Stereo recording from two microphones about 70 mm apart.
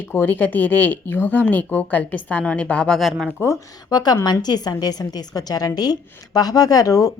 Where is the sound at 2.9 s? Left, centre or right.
Centre.